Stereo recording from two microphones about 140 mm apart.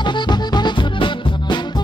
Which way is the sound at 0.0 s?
30° left (ahead or behind).